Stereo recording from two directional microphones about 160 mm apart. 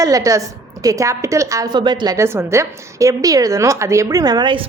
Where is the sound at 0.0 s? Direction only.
20° right (ahead or behind).